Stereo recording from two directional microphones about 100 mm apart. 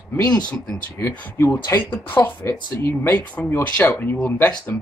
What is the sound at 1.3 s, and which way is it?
Speech, 30° left (ahead or behind).